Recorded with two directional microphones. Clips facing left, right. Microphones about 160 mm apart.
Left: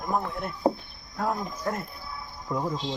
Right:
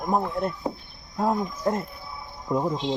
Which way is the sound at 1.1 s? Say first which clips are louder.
Right 4 dB; 20° right (ahead or behind).